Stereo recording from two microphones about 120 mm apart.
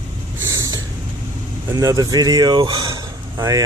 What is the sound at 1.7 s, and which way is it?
Speech, 30° right (ahead or behind).